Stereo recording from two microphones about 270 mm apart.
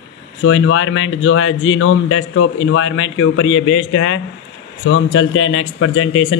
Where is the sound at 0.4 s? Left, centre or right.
Left.